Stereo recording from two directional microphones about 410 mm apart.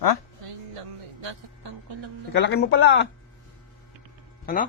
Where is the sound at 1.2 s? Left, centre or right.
Right.